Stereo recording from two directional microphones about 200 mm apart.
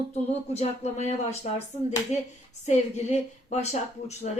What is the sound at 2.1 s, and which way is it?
A woman's voice, 35° left (ahead or behind).